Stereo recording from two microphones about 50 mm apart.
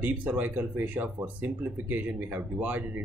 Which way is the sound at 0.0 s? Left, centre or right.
Right.